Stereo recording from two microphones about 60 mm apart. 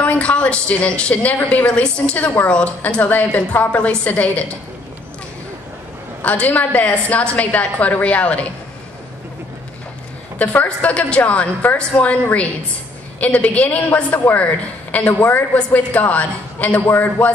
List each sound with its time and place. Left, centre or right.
0.0 s a woman's voice: left
6.4 s a woman's voice: left
10.4 s a woman's voice: left
13.2 s a woman's voice: left